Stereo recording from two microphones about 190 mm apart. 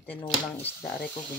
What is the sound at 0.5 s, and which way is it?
Cutlery, 10° left (ahead or behind).